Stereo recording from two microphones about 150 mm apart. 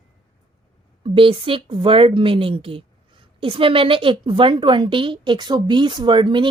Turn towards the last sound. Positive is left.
turn(degrees=-30)  # may be behind; listen again after turning